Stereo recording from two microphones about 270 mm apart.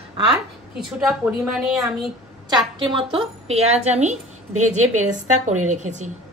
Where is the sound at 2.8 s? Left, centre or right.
Centre.